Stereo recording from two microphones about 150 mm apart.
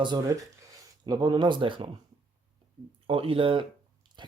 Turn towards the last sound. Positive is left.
turn(degrees=-30)  # may be behind; listen again after turning